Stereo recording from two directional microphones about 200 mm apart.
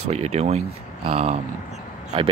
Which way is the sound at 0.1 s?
30° right (ahead or behind).